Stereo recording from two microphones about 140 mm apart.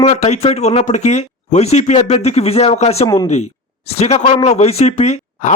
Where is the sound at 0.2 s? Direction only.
50° left (ahead or behind).